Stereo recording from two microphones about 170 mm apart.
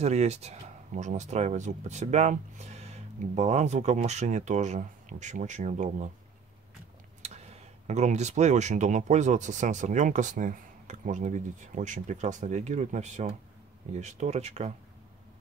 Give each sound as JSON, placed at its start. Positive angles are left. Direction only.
{"t": 0.0, "sound": "speech", "side_deg": -40}
{"t": 7.2, "sound": "speech", "side_deg": -40}